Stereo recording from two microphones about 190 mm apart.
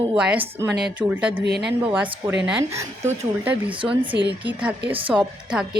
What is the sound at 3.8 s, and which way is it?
Speech, 25° right (ahead or behind).